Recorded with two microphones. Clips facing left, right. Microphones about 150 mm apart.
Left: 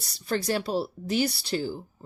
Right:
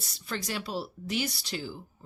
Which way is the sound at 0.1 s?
35° left (ahead or behind).